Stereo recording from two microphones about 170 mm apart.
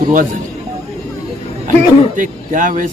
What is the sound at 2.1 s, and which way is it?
Speech, 50° right (ahead or behind).